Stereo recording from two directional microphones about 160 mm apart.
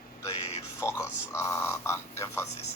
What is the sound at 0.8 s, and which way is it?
Speech, 15° left (ahead or behind).